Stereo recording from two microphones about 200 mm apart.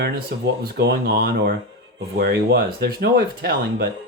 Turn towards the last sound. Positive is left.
turn(degrees=-50)  # may be behind; listen again after turning